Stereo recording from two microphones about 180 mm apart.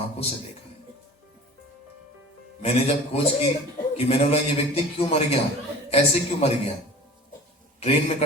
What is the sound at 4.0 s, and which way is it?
A man's voice, 35° left (ahead or behind).